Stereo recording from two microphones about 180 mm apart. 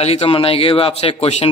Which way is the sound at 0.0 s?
35° left (ahead or behind).